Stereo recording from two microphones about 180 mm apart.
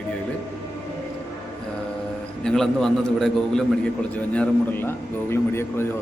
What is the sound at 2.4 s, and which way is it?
A man's voice, centre (ahead or behind).